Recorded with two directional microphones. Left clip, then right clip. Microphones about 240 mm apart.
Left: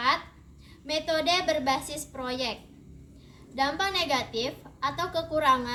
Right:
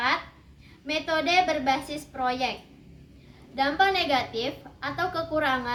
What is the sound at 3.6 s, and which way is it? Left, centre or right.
A woman's voice, centre.